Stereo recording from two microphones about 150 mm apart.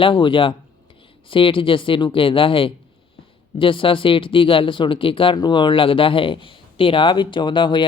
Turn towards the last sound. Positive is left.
turn(degrees=30)  # may be behind; listen again after turning